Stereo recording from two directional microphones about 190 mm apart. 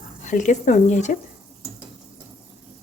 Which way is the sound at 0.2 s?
40° left (ahead or behind).